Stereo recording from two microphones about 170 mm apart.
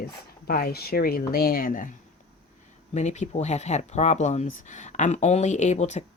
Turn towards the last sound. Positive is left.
turn(degrees=40)  # may be behind; listen again after turning